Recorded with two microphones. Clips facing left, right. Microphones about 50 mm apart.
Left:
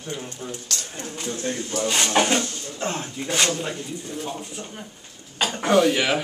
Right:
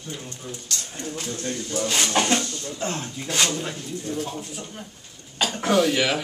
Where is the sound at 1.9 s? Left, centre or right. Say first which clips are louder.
Left 2 dB; centre.